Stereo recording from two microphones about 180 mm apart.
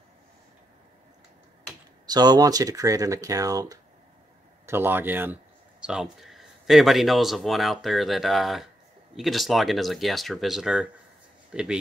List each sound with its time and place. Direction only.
2.0 s speech: 20° right (ahead or behind); by 11.7 s 5° right (ahead or behind)